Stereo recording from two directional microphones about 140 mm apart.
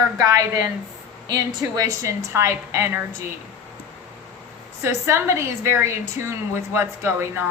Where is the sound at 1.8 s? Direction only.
20° right (ahead or behind).